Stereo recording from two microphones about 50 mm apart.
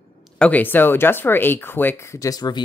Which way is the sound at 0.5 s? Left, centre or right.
Left.